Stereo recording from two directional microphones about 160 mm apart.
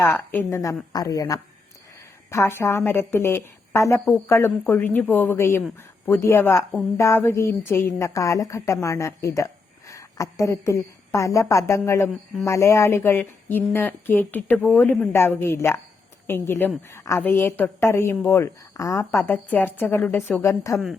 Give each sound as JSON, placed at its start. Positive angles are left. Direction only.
{"t": 0.3, "sound": "a woman's voice", "side_deg": 15}